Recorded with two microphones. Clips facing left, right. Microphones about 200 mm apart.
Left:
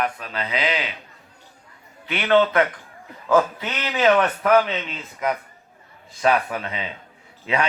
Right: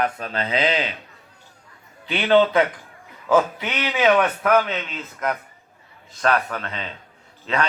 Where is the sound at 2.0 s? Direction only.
30° right (ahead or behind).